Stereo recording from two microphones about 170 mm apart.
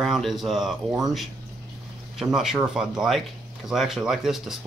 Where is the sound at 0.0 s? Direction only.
Centre (ahead or behind).